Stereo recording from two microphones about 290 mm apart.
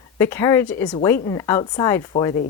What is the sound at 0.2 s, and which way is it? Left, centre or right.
Speech, centre.